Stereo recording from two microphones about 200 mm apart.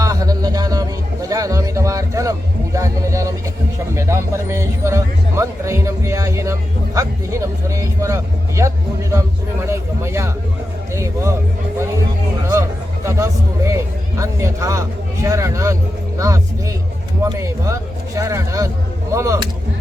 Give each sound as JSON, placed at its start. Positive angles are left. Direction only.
{"t": 0.0, "sound": "a sound", "side_deg": -15}
{"t": 2.7, "sound": "a man's voice", "side_deg": -15}
{"t": 13.1, "sound": "a man's voice", "side_deg": -15}